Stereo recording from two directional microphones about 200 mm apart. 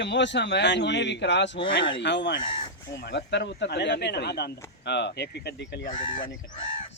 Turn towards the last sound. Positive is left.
turn(degrees=25)  # may be behind; listen again after turning